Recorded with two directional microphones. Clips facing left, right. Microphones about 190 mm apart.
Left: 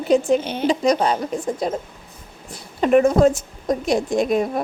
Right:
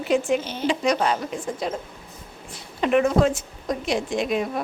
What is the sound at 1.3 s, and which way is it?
Speech, 40° left (ahead or behind).